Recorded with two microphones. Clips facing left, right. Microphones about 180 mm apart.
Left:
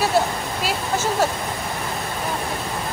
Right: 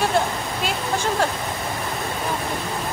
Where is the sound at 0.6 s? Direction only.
5° left (ahead or behind).